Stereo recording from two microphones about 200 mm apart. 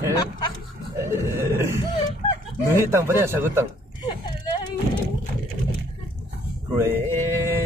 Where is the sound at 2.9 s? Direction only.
15° right (ahead or behind).